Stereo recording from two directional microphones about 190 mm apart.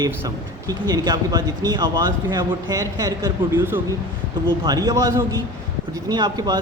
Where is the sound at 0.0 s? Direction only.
20° right (ahead or behind).